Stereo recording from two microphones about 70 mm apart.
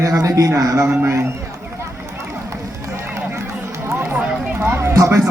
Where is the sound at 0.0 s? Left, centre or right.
Right.